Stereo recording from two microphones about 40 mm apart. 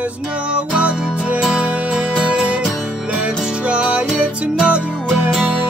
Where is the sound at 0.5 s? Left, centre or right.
Right.